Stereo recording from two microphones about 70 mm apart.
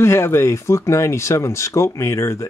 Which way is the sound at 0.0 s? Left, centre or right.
Left.